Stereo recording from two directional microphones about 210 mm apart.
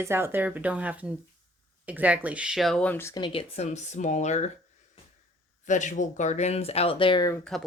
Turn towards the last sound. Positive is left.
turn(degrees=0)  # may be behind; listen again after turning